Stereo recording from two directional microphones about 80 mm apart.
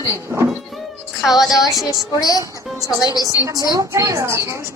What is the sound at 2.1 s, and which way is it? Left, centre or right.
A woman's voice, left.